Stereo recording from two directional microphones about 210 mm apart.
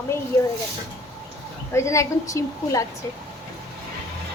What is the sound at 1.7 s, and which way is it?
A woman's voice, 15° left (ahead or behind).